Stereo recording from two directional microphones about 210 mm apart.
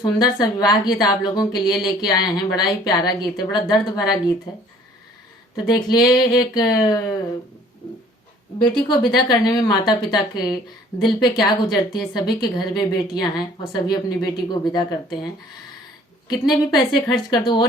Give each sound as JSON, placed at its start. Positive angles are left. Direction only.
{"t": 0.0, "sound": "a woman's voice", "side_deg": 20}
{"t": 5.6, "sound": "a woman's voice", "side_deg": 20}
{"t": 8.5, "sound": "a woman's voice", "side_deg": 20}
{"t": 16.3, "sound": "a woman's voice", "side_deg": 20}